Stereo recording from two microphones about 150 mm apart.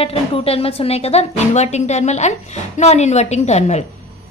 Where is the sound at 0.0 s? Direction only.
40° left (ahead or behind).